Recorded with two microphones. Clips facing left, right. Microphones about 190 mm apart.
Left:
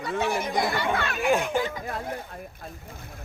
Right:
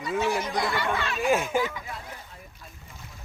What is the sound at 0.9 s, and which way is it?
Speech, 60° left (ahead or behind).